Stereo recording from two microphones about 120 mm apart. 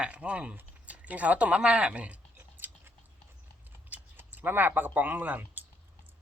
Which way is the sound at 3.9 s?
15° right (ahead or behind).